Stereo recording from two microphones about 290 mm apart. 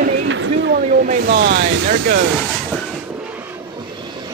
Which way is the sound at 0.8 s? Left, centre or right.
Right.